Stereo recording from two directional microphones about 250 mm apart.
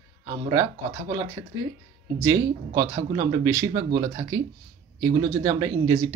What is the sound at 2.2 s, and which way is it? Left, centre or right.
Speech, centre.